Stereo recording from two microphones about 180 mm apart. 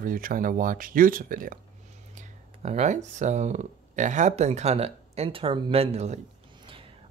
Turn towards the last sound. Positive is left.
turn(degrees=-35)  # may be behind; listen again after turning